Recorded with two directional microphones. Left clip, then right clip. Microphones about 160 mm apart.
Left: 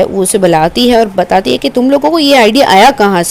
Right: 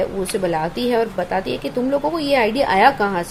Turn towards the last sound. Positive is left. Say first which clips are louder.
# left 9 dB
turn(degrees=65)  # may be behind; listen again after turning